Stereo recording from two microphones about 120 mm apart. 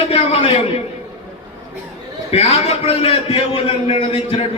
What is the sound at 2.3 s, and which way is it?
A man's voice, 60° left (ahead or behind).